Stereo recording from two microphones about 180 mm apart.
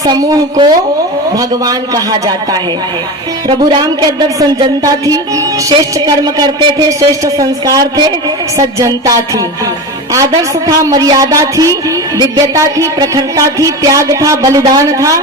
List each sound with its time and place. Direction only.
0.0 s music: 20° right (ahead or behind)
10.7 s music: 20° right (ahead or behind)